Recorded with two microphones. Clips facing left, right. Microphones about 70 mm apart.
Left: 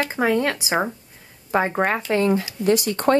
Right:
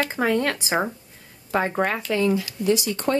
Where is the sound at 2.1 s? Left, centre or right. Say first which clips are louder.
Left 2 dB; left.